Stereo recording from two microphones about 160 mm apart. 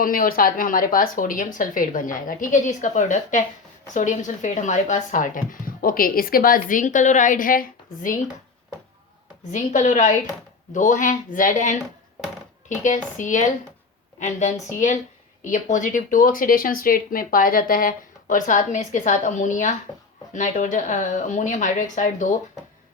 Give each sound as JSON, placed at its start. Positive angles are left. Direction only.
{"t": 0.0, "sound": "speech", "side_deg": 65}
{"t": 9.5, "sound": "speech", "side_deg": 50}